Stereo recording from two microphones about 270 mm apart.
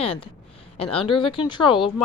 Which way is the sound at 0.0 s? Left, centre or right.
Left.